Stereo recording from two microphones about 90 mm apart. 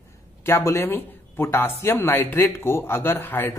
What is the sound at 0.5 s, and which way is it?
Speech, 30° left (ahead or behind).